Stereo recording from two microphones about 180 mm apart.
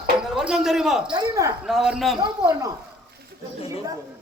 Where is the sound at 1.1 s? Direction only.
15° right (ahead or behind).